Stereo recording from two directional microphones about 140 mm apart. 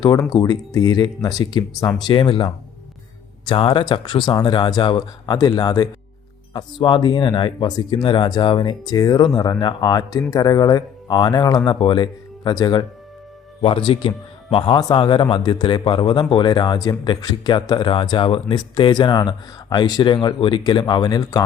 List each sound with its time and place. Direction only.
0.0 s a man's voice: 30° left (ahead or behind)